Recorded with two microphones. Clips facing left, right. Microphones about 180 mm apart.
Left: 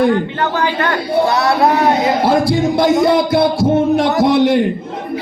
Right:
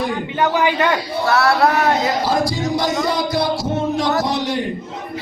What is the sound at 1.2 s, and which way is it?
Speech, 20° left (ahead or behind).